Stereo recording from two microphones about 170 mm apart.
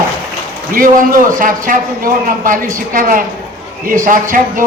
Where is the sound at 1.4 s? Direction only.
55° right (ahead or behind).